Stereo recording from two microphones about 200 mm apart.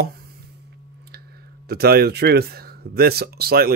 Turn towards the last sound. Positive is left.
turn(degrees=-50)  # may be behind; listen again after turning